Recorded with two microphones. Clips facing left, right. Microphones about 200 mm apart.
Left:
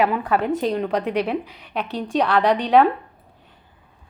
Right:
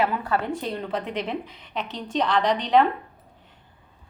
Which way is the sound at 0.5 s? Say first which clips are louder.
Left 8 dB; 90° left.